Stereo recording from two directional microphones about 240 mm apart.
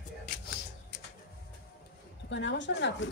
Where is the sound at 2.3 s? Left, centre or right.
Left.